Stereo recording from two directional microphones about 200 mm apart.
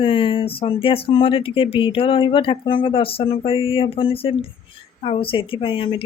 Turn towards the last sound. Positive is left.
turn(degrees=25)  # may be behind; listen again after turning